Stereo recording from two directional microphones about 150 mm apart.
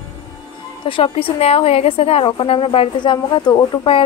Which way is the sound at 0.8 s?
40° left (ahead or behind).